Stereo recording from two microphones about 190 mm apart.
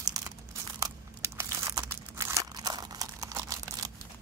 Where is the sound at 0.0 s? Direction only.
15° right (ahead or behind).